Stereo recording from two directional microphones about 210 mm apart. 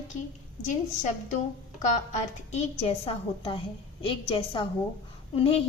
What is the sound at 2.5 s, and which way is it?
A woman's voice, 30° left (ahead or behind).